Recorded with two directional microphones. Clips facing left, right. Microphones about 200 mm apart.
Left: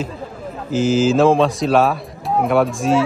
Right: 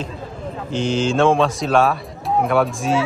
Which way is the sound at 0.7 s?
5° left (ahead or behind).